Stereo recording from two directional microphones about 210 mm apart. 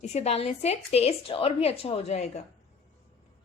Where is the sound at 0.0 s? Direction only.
30° left (ahead or behind).